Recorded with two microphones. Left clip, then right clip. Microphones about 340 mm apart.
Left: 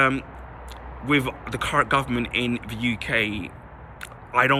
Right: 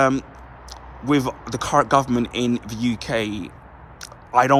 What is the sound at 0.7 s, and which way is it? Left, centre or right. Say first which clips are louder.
A man's voice: right 1 dB; centre.